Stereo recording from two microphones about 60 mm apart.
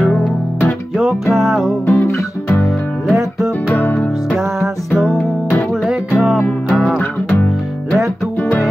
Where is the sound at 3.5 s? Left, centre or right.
Left.